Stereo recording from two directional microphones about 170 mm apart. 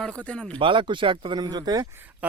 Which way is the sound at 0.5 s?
30° right (ahead or behind).